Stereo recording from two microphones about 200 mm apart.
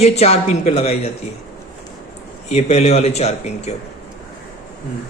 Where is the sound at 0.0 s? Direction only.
30° left (ahead or behind).